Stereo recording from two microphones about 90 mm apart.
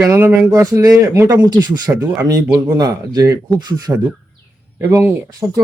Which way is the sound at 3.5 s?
50° right (ahead or behind).